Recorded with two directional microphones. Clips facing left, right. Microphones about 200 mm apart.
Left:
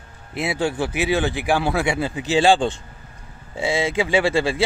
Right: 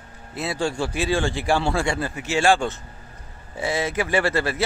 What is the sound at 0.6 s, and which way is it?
Speech, 20° left (ahead or behind).